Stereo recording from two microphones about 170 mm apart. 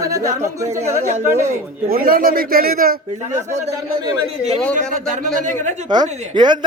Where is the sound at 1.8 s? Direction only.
60° right (ahead or behind).